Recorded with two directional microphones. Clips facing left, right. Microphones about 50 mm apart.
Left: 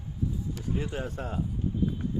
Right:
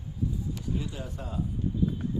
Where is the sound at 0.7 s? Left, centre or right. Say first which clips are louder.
Left 3 dB; left.